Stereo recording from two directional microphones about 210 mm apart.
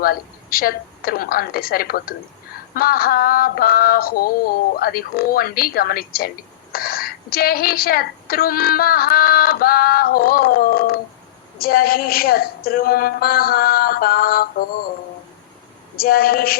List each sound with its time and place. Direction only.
0.0 s a woman's voice: 45° left (ahead or behind)
16.0 s a woman's voice: 45° left (ahead or behind)